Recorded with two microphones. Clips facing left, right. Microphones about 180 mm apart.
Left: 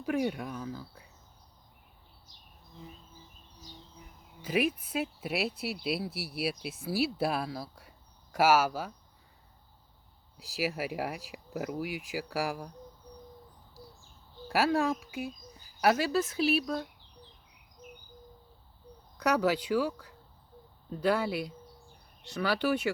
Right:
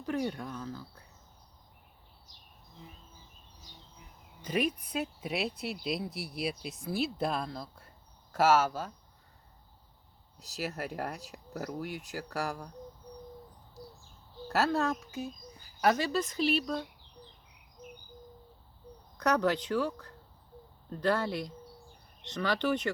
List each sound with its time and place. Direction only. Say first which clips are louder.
0.0 s speech: left 3 dB; 10° left (ahead or behind)
4.4 s speech: left 2 dB; 5° left (ahead or behind)
10.3 s speech: left 4 dB; 10° left (ahead or behind)
14.4 s speech: left 2 dB; 10° left (ahead or behind)
19.1 s speech: left 1 dB; 10° left (ahead or behind)